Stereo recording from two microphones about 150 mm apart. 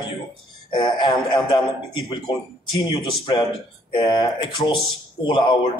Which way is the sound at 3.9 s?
30° left (ahead or behind).